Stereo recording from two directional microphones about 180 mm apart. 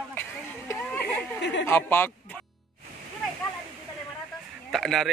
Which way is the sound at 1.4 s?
85° left.